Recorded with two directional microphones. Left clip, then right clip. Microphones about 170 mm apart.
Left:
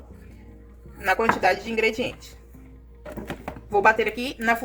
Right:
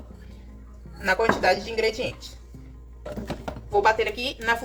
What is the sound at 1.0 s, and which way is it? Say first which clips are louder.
Speech: even; 55° left (ahead or behind).